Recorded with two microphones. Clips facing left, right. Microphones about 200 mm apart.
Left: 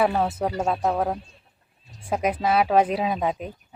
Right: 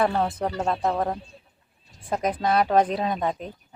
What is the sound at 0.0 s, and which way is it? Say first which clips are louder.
Speech: left 1 dB; 10° left (ahead or behind).